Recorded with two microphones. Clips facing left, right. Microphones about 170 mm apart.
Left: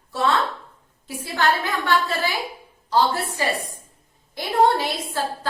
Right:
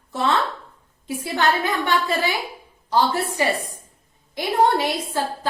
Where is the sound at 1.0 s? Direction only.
20° right (ahead or behind).